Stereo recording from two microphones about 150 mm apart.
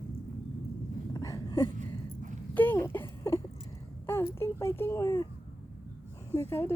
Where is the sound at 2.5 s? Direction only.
15° left (ahead or behind).